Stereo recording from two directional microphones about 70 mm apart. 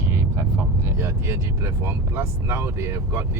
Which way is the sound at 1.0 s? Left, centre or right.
Right.